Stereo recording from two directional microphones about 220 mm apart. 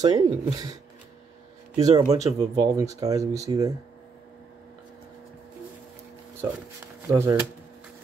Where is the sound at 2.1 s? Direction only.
15° right (ahead or behind).